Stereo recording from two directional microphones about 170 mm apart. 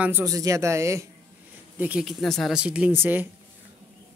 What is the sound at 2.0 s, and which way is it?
Speech, 5° left (ahead or behind).